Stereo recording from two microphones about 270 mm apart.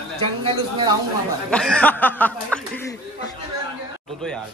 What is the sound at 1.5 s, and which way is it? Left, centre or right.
Speech, centre.